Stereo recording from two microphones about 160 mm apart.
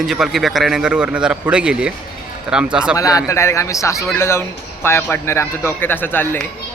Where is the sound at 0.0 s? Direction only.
Centre (ahead or behind).